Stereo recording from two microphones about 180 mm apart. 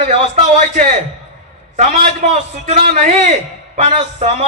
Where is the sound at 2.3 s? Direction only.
35° right (ahead or behind).